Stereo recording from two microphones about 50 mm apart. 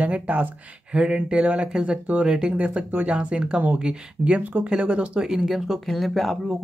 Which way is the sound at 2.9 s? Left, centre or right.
Right.